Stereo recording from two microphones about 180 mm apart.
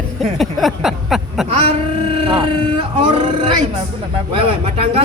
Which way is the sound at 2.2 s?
30° right (ahead or behind).